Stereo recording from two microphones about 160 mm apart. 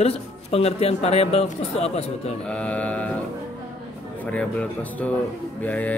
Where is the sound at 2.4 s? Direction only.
5° left (ahead or behind).